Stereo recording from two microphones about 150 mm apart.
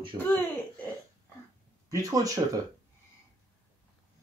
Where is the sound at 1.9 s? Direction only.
25° right (ahead or behind).